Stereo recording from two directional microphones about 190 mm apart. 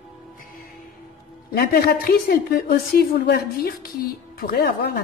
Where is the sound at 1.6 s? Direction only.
55° left (ahead or behind).